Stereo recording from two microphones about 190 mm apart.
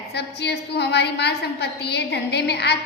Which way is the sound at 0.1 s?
60° left (ahead or behind).